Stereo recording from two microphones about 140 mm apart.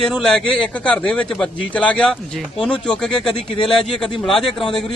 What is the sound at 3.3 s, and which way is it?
Speech, 35° left (ahead or behind).